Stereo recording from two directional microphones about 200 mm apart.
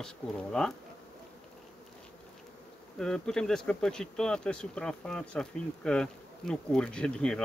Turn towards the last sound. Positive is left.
turn(degrees=5)  # may be behind; listen again after turning